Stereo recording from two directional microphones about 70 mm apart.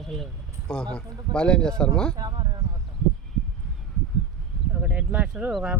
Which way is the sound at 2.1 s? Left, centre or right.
Right.